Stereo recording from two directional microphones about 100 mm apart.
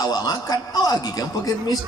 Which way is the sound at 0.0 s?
35° left (ahead or behind).